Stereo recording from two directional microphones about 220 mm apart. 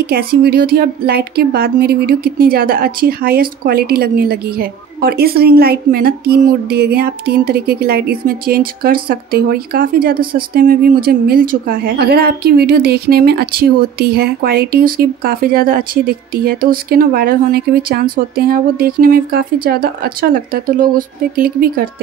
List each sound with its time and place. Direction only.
0.0 s speech: 45° right (ahead or behind)